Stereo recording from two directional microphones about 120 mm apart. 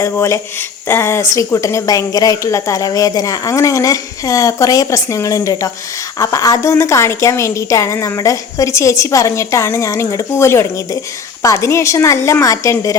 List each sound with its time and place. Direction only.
0.0 s speech: 25° left (ahead or behind)